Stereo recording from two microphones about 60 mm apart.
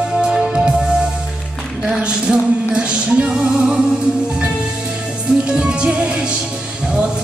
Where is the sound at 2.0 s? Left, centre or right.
Centre.